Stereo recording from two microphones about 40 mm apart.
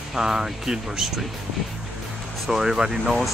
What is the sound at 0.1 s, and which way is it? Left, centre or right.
Speech, centre.